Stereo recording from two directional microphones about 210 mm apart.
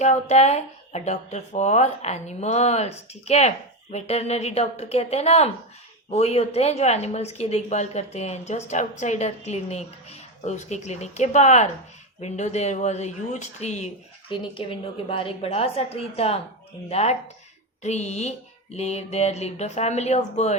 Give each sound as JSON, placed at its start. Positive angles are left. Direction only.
{"t": 0.0, "sound": "a woman's voice", "side_deg": 35}